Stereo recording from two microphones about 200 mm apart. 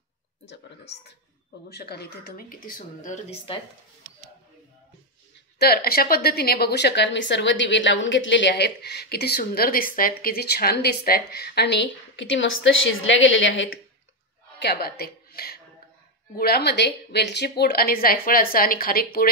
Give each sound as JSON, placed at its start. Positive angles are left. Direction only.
{"t": 1.7, "sound": "a woman's voice", "side_deg": 55}
{"t": 5.6, "sound": "a woman's voice", "side_deg": 50}
{"t": 14.6, "sound": "a woman's voice", "side_deg": 55}